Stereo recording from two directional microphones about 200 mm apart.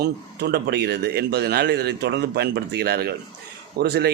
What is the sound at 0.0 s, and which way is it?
A man's voice, 55° right (ahead or behind).